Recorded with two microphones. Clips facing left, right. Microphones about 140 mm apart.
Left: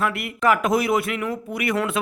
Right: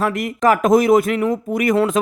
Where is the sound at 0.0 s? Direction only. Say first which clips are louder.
Right 5 dB; 40° right (ahead or behind).